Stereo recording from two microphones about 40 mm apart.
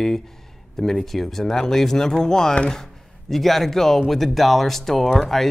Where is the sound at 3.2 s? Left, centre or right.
Centre.